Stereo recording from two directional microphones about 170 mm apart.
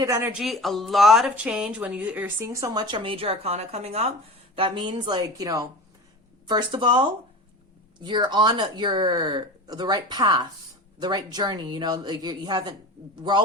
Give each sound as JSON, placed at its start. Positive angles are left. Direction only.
{"t": 0.0, "sound": "speech", "side_deg": -15}